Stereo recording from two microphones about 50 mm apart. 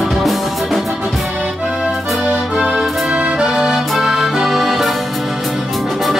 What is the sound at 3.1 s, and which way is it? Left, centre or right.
Music, right.